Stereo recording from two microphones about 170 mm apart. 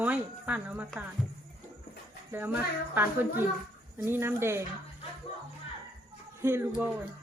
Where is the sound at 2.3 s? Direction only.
10° right (ahead or behind).